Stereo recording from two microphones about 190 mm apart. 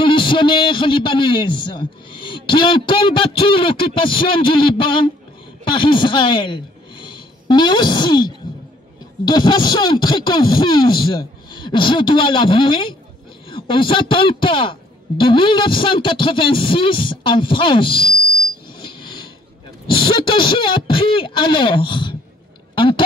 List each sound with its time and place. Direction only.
0.0 s a man's voice: 25° left (ahead or behind)
18.9 s a sound: 25° left (ahead or behind)
19.9 s a man's voice: 25° left (ahead or behind)